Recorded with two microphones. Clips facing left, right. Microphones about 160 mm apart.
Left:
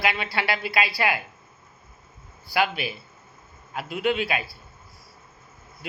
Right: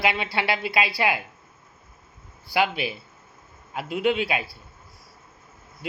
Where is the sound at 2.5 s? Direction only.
20° right (ahead or behind).